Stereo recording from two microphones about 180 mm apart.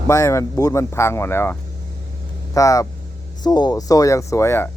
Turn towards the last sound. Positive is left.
turn(degrees=15)  # may be behind; listen again after turning